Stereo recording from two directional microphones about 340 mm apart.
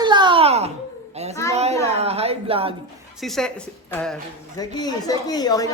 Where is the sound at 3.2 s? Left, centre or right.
Centre.